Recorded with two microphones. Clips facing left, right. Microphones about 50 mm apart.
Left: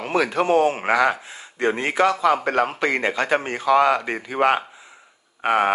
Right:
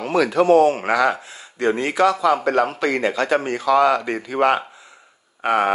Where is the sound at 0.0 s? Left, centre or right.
Left.